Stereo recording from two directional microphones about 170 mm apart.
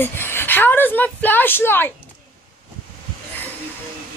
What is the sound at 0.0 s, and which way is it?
A woman's voice, 15° left (ahead or behind).